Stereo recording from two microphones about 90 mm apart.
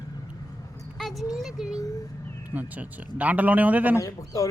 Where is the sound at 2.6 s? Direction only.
15° right (ahead or behind).